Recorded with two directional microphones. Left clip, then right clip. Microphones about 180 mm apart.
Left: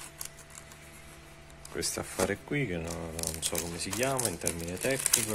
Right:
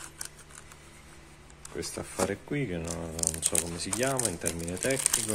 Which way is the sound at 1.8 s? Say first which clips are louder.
Even; centre (ahead or behind).